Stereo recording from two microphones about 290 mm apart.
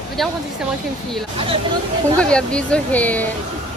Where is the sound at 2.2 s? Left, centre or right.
Centre.